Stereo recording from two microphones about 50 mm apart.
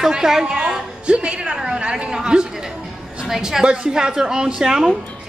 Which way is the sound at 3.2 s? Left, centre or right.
Centre.